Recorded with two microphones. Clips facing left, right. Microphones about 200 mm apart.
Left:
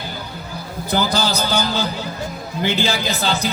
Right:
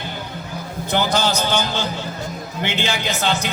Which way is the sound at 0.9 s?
35° left (ahead or behind).